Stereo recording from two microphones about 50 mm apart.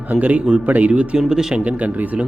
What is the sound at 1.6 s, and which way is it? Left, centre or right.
Speech, right.